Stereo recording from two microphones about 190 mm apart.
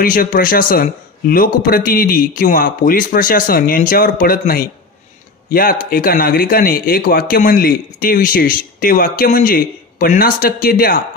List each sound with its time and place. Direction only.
0.0 s speech: 45° left (ahead or behind)